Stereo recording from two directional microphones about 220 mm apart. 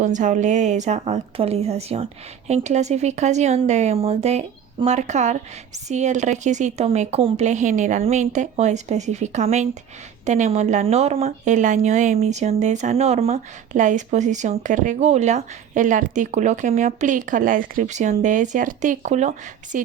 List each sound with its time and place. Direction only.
0.0 s speech: 35° right (ahead or behind)